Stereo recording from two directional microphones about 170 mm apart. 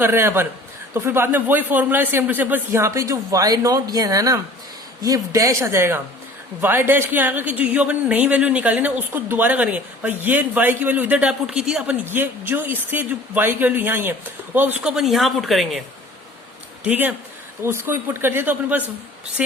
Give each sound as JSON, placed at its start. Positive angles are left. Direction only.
{"t": 0.0, "sound": "speech", "side_deg": -15}
{"t": 16.8, "sound": "speech", "side_deg": -10}